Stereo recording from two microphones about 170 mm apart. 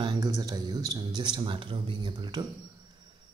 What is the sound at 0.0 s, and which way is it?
Speech, 25° right (ahead or behind).